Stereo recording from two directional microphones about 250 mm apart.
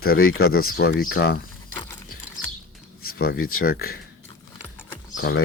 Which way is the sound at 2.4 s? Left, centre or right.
Left.